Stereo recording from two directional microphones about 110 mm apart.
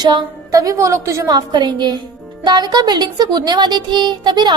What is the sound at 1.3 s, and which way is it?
A woman's voice, 45° right (ahead or behind).